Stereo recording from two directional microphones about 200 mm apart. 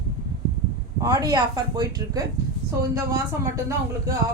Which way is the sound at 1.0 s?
20° right (ahead or behind).